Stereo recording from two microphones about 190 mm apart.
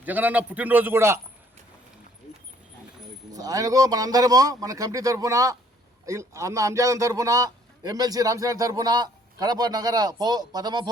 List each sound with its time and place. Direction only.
0.0 s a man's voice: 10° right (ahead or behind)
3.3 s a man's voice: 20° right (ahead or behind)